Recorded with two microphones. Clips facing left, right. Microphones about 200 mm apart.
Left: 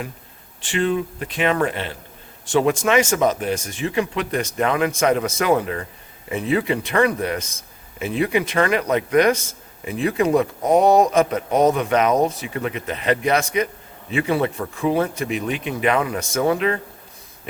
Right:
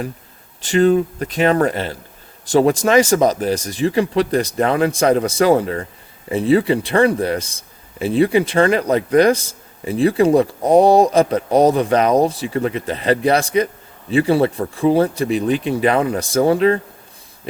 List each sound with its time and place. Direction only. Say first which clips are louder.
0.6 s a man's voice: right 7 dB; 40° right (ahead or behind)